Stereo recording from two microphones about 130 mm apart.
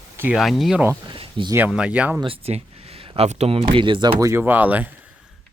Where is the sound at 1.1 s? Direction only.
40° right (ahead or behind).